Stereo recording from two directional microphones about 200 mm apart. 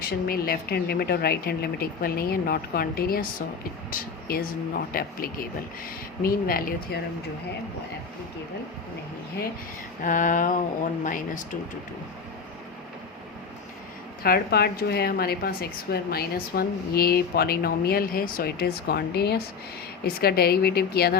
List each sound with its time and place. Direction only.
0.0 s a woman's voice: 50° left (ahead or behind)
10.0 s a sound: 40° left (ahead or behind)
14.2 s a woman's voice: 50° left (ahead or behind)